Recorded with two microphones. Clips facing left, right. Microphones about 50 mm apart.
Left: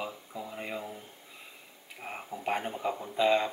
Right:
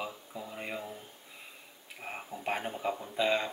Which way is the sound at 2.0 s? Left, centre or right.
Centre.